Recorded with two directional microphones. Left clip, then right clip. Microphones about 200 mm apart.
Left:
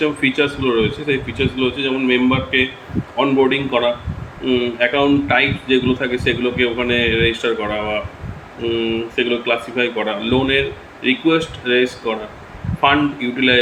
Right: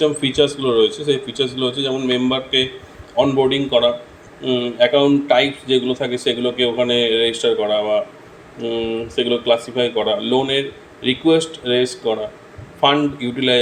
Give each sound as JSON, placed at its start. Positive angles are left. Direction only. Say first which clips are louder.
{"t": 0.0, "sound": "speech", "louder": "right 1 dB", "side_deg": -35}